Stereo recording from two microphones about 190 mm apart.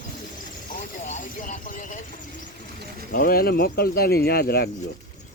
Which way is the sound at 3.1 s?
50° left (ahead or behind).